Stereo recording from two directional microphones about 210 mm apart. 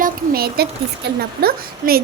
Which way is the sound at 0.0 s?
45° right (ahead or behind).